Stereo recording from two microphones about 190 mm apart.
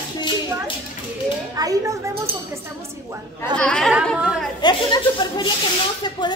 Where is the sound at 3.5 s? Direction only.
5° left (ahead or behind).